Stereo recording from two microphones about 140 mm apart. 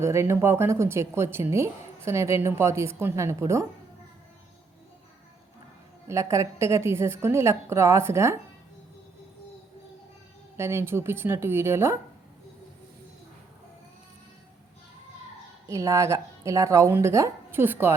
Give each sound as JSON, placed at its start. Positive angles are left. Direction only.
{"t": 0.0, "sound": "a woman's voice", "side_deg": -20}
{"t": 6.1, "sound": "a woman's voice", "side_deg": -20}
{"t": 10.6, "sound": "speech", "side_deg": -15}
{"t": 15.6, "sound": "a woman's voice", "side_deg": -20}